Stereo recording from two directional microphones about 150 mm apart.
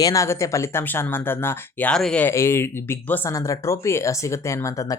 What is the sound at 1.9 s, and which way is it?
Speech, 5° left (ahead or behind).